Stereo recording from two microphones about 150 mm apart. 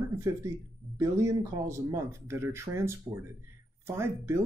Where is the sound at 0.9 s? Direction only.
20° right (ahead or behind).